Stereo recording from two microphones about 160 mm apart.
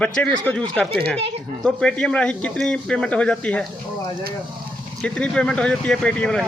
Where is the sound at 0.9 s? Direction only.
75° right (ahead or behind).